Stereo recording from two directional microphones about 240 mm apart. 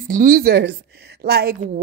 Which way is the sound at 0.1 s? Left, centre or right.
Right.